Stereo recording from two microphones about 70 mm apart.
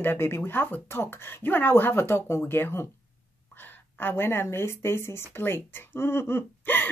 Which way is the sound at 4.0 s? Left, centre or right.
Left.